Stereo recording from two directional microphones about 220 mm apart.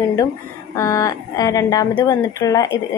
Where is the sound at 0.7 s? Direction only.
15° left (ahead or behind).